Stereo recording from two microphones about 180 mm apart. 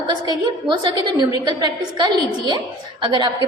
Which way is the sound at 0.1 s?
25° right (ahead or behind).